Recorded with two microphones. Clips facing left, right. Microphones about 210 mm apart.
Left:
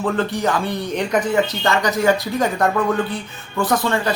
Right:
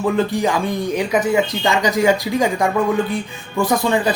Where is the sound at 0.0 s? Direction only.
10° right (ahead or behind).